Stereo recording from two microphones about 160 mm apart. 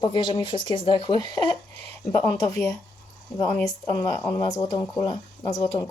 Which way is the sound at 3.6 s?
20° left (ahead or behind).